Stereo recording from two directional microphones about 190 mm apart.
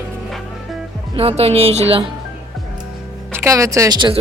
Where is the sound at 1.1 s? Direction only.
30° right (ahead or behind).